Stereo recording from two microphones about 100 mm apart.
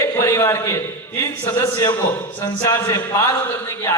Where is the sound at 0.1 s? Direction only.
25° left (ahead or behind).